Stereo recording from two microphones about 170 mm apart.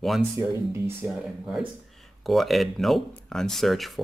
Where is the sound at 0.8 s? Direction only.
10° right (ahead or behind).